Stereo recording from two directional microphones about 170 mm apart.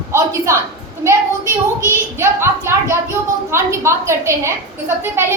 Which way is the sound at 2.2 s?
15° right (ahead or behind).